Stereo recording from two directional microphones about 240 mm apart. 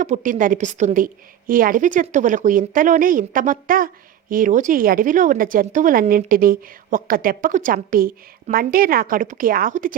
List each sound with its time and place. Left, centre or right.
0.0 s a woman's voice: right